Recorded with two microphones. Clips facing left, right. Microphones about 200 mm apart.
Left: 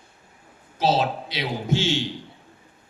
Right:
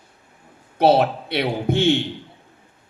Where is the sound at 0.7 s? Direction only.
60° right (ahead or behind).